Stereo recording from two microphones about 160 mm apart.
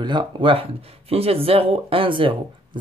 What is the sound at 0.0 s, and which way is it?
Speech, 30° right (ahead or behind).